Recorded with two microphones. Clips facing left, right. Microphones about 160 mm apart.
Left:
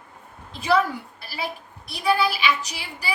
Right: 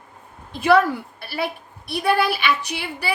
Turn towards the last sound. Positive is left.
turn(degrees=-60)  # may be behind; listen again after turning